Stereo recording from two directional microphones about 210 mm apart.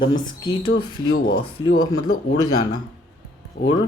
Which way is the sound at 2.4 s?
20° left (ahead or behind).